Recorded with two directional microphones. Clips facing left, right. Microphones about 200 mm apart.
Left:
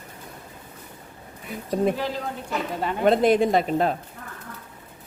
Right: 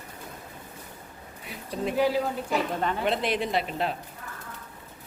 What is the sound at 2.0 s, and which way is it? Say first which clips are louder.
Speech: right 5 dB; 10° right (ahead or behind).